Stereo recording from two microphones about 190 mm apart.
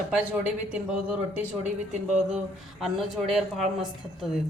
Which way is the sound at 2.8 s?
Centre (ahead or behind).